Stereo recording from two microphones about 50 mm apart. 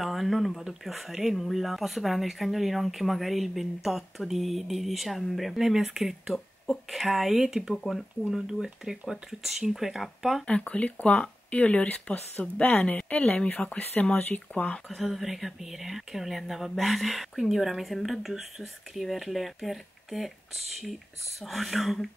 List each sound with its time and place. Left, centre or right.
0.0 s a sound: centre
0.6 s speech: centre
7.7 s speech: centre
8.3 s speech: centre
10.4 s speech: left
14.9 s speech: centre